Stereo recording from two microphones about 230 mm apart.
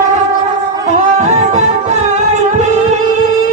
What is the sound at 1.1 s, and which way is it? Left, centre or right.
Music, right.